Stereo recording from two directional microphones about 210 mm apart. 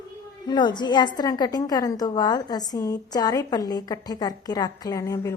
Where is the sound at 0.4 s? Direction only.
20° left (ahead or behind).